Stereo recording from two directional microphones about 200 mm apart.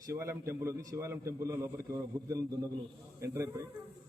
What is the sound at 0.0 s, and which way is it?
A man's voice, 15° right (ahead or behind).